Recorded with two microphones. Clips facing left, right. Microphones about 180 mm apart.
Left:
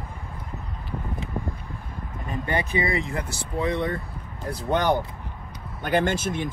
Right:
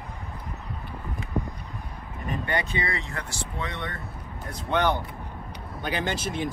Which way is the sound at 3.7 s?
30° left (ahead or behind).